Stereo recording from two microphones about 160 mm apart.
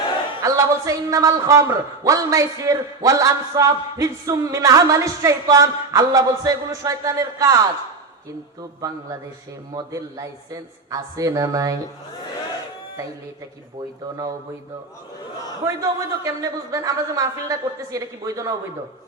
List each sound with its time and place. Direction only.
0.4 s a man's voice: 20° right (ahead or behind)
9.7 s a man's voice: 20° right (ahead or behind)
15.6 s a man's voice: 20° right (ahead or behind)